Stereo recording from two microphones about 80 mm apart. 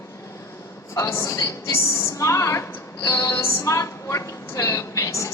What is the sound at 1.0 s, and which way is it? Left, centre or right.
A woman's voice, left.